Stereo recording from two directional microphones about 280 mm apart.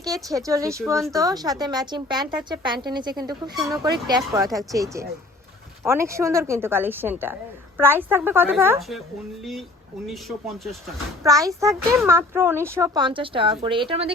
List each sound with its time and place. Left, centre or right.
0.0 s a woman's voice: centre
11.2 s a woman's voice: centre